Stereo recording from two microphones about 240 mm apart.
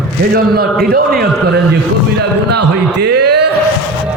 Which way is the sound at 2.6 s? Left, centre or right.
Right.